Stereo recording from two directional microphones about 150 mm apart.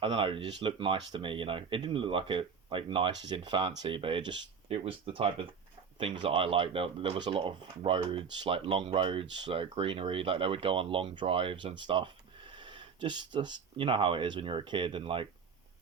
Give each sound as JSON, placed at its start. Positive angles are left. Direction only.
{"t": 0.0, "sound": "speech", "side_deg": -35}